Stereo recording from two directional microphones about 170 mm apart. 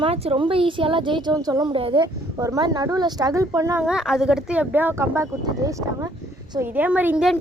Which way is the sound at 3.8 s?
5° right (ahead or behind).